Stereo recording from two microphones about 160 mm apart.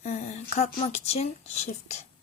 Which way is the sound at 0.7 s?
40° left (ahead or behind).